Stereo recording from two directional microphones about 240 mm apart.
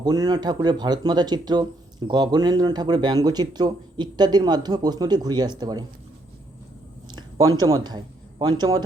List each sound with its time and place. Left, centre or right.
0.0 s speech: centre
7.1 s a man's voice: centre